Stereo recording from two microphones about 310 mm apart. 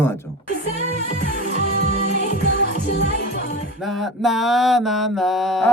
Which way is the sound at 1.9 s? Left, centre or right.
Left.